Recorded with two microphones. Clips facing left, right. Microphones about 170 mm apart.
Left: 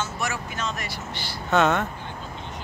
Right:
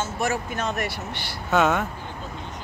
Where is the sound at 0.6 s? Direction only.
60° right (ahead or behind).